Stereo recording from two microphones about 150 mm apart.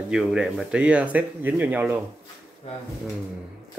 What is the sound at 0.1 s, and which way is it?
Speech, 5° right (ahead or behind).